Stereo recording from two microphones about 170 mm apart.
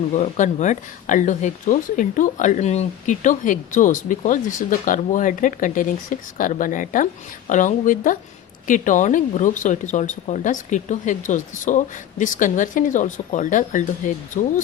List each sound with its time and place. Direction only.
0.1 s speech: 45° left (ahead or behind)